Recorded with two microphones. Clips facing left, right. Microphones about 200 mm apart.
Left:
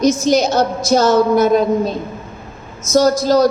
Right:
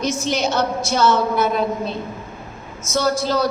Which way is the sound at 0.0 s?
40° left (ahead or behind).